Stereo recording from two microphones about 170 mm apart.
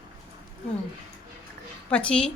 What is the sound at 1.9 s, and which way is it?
Speech, 5° left (ahead or behind).